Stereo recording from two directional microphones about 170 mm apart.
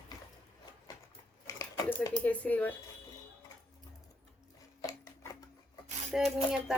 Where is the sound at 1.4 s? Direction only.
20° left (ahead or behind).